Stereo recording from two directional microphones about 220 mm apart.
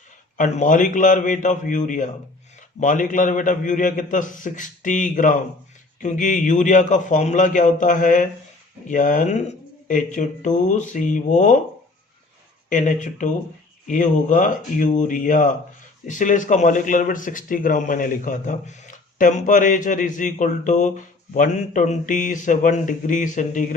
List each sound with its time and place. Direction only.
0.3 s speech: 35° left (ahead or behind)
12.7 s speech: 35° left (ahead or behind)